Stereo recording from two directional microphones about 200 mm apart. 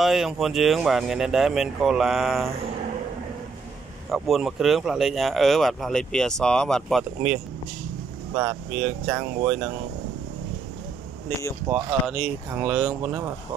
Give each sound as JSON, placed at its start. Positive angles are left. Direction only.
{"t": 0.0, "sound": "speech", "side_deg": 0}
{"t": 4.1, "sound": "speech", "side_deg": 0}
{"t": 8.4, "sound": "speech", "side_deg": -5}
{"t": 11.7, "sound": "speech", "side_deg": -5}